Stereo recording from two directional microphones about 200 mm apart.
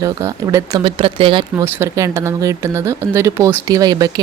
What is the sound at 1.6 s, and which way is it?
A woman's voice, 15° right (ahead or behind).